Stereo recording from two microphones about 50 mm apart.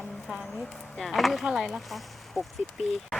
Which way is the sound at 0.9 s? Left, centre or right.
Centre.